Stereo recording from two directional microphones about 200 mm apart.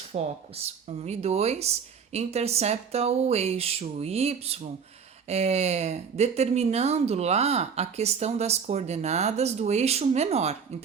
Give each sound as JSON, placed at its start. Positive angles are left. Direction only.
{"t": 0.1, "sound": "speech", "side_deg": -30}